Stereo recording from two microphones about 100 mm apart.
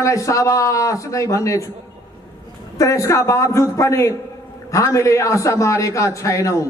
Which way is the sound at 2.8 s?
35° left (ahead or behind).